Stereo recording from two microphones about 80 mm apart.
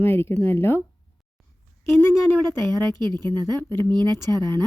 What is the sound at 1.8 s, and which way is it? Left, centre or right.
Speech, left.